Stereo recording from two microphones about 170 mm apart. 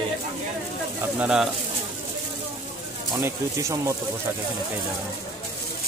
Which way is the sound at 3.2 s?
15° right (ahead or behind).